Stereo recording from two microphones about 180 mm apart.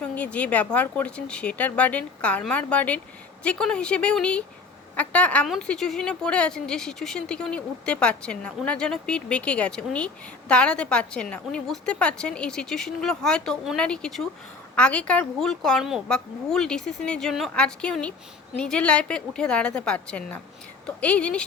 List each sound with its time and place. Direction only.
0.0 s a woman's voice: 5° left (ahead or behind)